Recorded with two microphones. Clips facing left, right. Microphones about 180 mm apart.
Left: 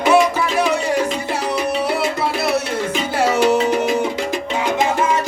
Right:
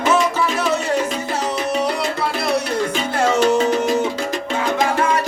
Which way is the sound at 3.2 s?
10° left (ahead or behind).